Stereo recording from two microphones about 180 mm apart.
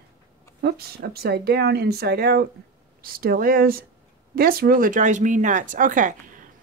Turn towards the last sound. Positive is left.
turn(degrees=-45)  # may be behind; listen again after turning